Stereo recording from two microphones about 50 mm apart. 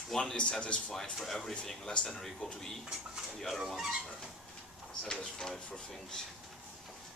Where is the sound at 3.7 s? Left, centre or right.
Centre.